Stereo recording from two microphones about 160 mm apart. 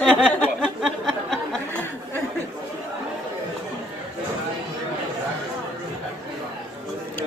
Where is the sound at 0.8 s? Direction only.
Centre (ahead or behind).